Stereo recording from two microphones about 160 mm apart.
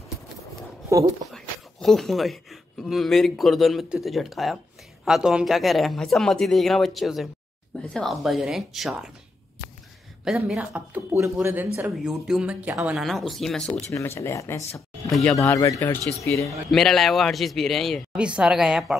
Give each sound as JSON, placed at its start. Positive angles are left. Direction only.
{"t": 0.8, "sound": "speech", "side_deg": -20}
{"t": 1.3, "sound": "a man's voice", "side_deg": 0}
{"t": 10.2, "sound": "a man's voice", "side_deg": -5}
{"t": 13.9, "sound": "speech", "side_deg": 15}
{"t": 15.0, "sound": "speech", "side_deg": 0}
{"t": 15.3, "sound": "speech", "side_deg": 20}
{"t": 16.4, "sound": "a man's voice", "side_deg": 0}